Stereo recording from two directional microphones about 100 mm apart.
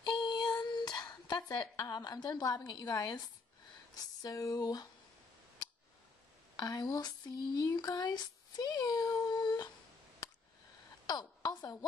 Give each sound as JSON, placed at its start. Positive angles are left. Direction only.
{"t": 0.2, "sound": "a sound", "side_deg": 50}
{"t": 6.5, "sound": "speech", "side_deg": 40}
{"t": 11.1, "sound": "a woman's voice", "side_deg": 45}